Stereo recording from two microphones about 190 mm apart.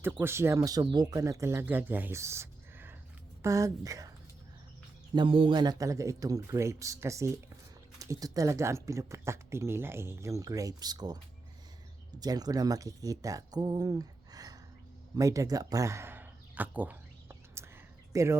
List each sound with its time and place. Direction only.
0.0 s speech: 10° right (ahead or behind)
5.1 s speech: 25° right (ahead or behind)
12.2 s speech: 20° right (ahead or behind)
15.1 s a sound: 15° right (ahead or behind)
18.1 s speech: 15° right (ahead or behind)